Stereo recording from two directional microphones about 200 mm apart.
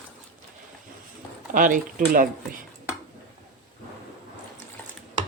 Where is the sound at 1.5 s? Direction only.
40° right (ahead or behind).